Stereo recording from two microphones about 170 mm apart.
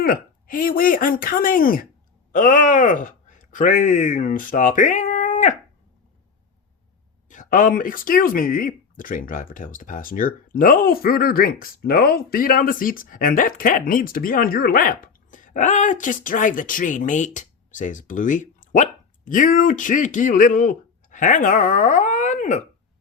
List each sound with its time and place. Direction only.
0.0 s speech: 55° left (ahead or behind)
7.3 s speech: 50° left (ahead or behind)